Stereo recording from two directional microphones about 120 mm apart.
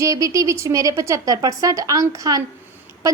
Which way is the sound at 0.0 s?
25° right (ahead or behind).